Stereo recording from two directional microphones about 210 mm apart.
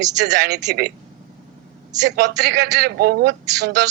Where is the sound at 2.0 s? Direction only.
55° right (ahead or behind).